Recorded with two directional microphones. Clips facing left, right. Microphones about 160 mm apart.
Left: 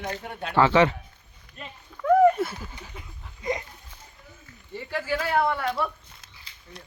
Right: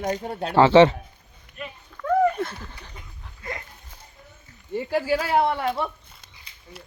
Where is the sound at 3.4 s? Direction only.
20° left (ahead or behind).